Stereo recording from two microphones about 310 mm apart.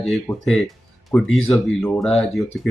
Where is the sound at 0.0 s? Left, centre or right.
Centre.